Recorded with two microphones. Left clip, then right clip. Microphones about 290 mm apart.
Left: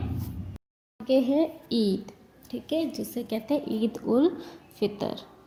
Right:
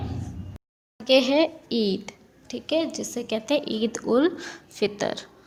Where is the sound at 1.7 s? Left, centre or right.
Right.